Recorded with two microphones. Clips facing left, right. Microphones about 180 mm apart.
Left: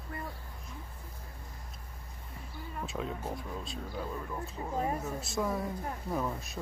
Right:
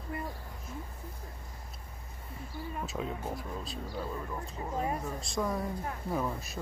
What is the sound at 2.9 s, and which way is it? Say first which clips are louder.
Speech: left 2 dB; centre (ahead or behind).